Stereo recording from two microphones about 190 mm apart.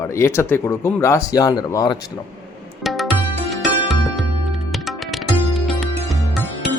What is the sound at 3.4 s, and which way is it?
Music, centre (ahead or behind).